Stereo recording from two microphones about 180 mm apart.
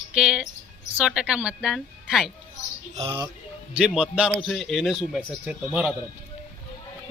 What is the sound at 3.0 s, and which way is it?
Speech, 30° right (ahead or behind).